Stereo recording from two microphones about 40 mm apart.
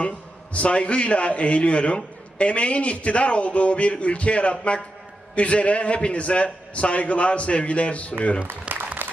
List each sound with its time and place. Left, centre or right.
0.5 s a man's voice: left
8.7 s applause: right